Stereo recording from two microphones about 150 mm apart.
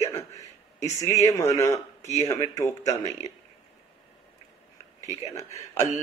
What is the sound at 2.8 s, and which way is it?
Speech, 50° left (ahead or behind).